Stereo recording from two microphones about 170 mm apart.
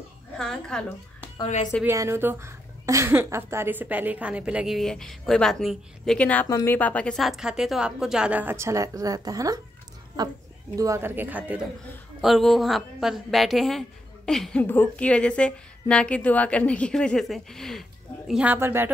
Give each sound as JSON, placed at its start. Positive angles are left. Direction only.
{"t": 0.4, "sound": "a woman's voice", "side_deg": 5}
{"t": 1.9, "sound": "a woman's voice", "side_deg": -15}
{"t": 18.3, "sound": "speech", "side_deg": -10}